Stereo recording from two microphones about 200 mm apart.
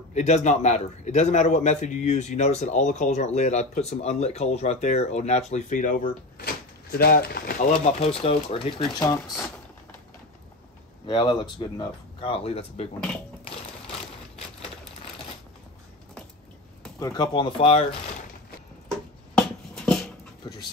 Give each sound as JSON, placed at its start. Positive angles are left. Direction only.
{"t": 0.1, "sound": "a man's voice", "side_deg": 35}
{"t": 7.7, "sound": "speech", "side_deg": 30}
{"t": 11.1, "sound": "speech", "side_deg": 20}
{"t": 17.0, "sound": "speech", "side_deg": 20}
{"t": 19.3, "sound": "dog", "side_deg": 0}